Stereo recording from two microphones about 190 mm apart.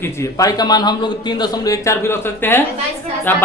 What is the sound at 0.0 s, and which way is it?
A man's voice, 15° left (ahead or behind).